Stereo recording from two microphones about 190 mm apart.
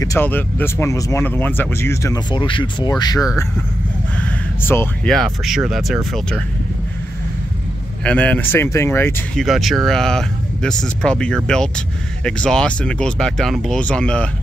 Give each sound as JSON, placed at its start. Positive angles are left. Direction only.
{"t": 0.0, "sound": "speech", "side_deg": 15}
{"t": 4.2, "sound": "speech", "side_deg": 10}
{"t": 8.0, "sound": "speech", "side_deg": 5}
{"t": 9.4, "sound": "speech", "side_deg": 0}